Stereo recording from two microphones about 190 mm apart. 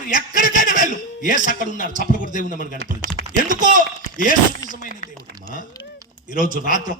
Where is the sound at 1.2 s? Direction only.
45° left (ahead or behind).